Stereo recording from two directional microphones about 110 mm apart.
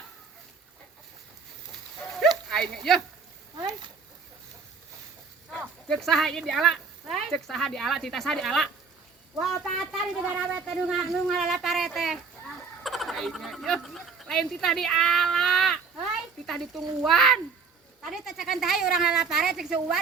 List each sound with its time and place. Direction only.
2.5 s speech: centre (ahead or behind)
3.6 s a sound: 40° right (ahead or behind)
5.5 s speech: centre (ahead or behind)